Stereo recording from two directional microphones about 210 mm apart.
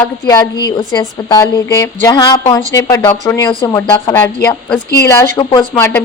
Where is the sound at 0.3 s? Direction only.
20° left (ahead or behind).